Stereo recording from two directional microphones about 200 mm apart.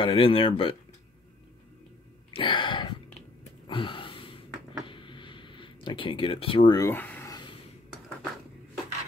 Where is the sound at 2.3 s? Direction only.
25° left (ahead or behind).